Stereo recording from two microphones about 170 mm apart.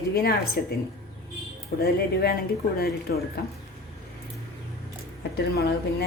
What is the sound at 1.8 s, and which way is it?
A woman's voice, 65° left (ahead or behind).